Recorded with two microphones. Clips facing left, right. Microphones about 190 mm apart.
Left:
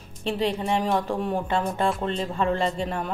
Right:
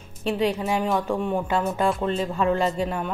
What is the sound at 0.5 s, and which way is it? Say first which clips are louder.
Speech: right 1 dB; 5° right (ahead or behind).